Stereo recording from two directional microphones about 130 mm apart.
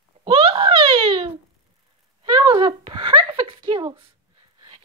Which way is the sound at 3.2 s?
35° right (ahead or behind).